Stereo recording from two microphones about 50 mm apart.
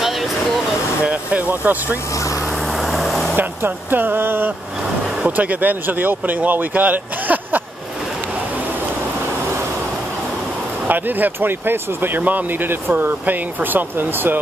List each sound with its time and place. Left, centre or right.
1.0 s speech: right
2.7 s vehicle: centre
3.3 s speech: right
5.2 s speech: right
10.9 s speech: right
12.2 s speech: right